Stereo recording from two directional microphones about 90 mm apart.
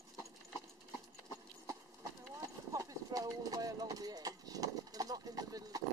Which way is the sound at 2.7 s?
40° right (ahead or behind).